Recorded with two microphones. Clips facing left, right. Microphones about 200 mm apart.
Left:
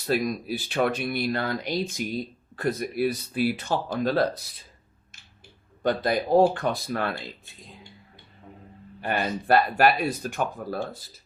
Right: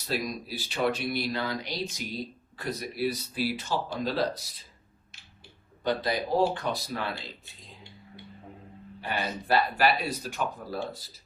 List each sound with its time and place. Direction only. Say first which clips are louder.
0.0 s speech: left 6 dB; 55° left (ahead or behind)
5.8 s speech: left 4 dB; 50° left (ahead or behind)
9.0 s speech: left 5 dB; 50° left (ahead or behind)